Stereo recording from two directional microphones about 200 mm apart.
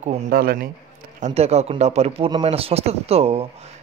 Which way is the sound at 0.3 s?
50° right (ahead or behind).